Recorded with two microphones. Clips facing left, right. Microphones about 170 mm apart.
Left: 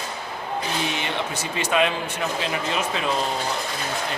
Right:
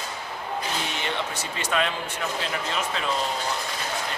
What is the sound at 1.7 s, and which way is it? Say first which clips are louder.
Speech: left 5 dB; 15° left (ahead or behind).